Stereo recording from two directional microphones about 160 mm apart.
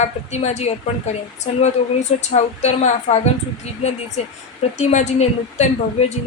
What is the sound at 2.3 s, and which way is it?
A woman's voice, 45° left (ahead or behind).